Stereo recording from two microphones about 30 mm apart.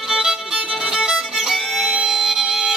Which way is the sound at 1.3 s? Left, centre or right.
Centre.